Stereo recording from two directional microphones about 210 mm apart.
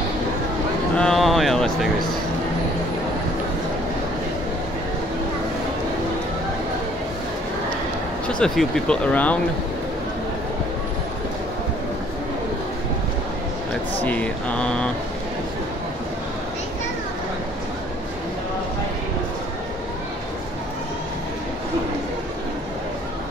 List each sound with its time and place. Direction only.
0.9 s a sound: centre (ahead or behind)
8.3 s speech: 5° left (ahead or behind)
14.0 s speech: 5° left (ahead or behind)